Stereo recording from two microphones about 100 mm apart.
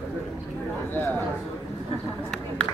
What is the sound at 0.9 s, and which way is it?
Speech, 20° left (ahead or behind).